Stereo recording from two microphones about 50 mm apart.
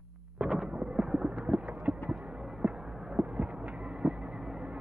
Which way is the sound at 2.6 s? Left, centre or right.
Centre.